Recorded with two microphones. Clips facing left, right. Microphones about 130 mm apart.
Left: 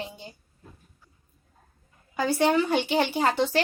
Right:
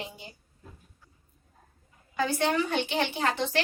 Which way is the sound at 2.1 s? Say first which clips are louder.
Left 4 dB; 35° left (ahead or behind).